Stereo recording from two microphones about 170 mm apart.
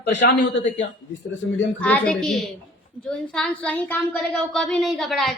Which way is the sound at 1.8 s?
10° left (ahead or behind).